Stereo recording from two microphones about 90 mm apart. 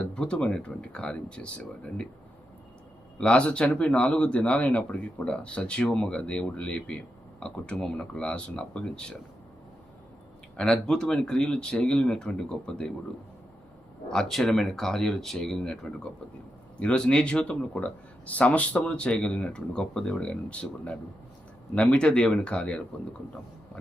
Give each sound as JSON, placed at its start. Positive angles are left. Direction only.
{"t": 0.0, "sound": "speech", "side_deg": 10}
{"t": 3.2, "sound": "speech", "side_deg": 10}
{"t": 10.6, "sound": "speech", "side_deg": 5}
{"t": 14.1, "sound": "speech", "side_deg": 5}